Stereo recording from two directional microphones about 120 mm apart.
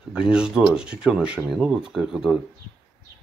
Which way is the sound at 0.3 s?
5° right (ahead or behind).